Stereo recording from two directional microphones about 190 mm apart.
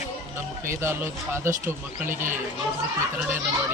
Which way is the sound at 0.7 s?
15° right (ahead or behind).